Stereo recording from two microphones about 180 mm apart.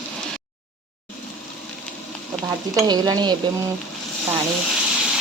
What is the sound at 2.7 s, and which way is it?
Stir, 20° right (ahead or behind).